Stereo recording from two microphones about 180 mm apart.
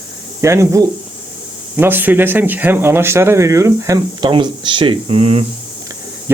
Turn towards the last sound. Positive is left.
turn(degrees=-30)  # may be behind; listen again after turning